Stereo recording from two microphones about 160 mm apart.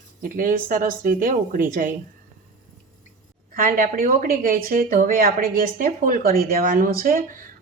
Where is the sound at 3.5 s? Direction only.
60° right (ahead or behind).